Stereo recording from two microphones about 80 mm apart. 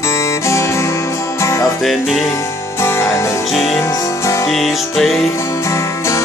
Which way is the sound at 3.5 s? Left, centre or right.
Centre.